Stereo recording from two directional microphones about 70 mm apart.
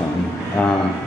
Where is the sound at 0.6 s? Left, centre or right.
Centre.